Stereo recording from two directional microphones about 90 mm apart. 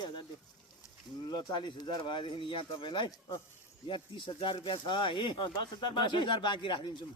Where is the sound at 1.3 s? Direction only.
55° left (ahead or behind).